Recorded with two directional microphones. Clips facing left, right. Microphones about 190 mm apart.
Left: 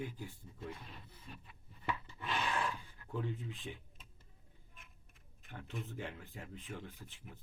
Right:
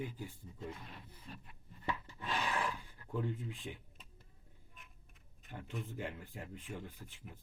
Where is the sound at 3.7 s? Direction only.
5° right (ahead or behind).